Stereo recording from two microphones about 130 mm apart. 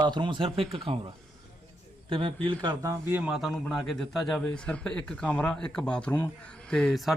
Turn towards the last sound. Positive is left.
turn(degrees=0)  # may be behind; listen again after turning